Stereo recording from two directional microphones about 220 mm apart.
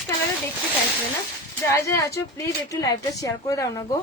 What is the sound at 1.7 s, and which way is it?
Speech, 15° left (ahead or behind).